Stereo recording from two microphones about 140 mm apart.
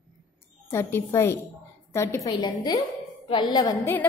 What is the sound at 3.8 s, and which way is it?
Speech, 15° left (ahead or behind).